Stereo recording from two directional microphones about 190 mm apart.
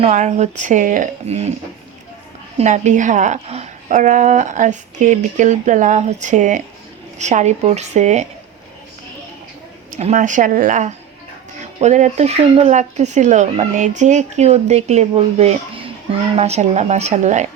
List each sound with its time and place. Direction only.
0.0 s speech: 40° right (ahead or behind)
2.6 s speech: 40° right (ahead or behind)
9.9 s speech: 40° right (ahead or behind)